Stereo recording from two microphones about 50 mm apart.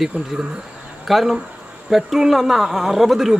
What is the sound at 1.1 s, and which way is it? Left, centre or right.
A man's voice, centre.